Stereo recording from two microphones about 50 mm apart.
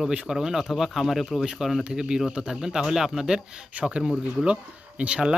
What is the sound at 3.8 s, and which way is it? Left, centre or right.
Speech, right.